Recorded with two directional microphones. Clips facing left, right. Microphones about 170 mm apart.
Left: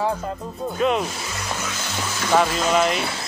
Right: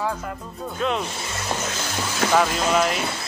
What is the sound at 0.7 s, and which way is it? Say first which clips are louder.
Speech: left 4 dB; 5° left (ahead or behind).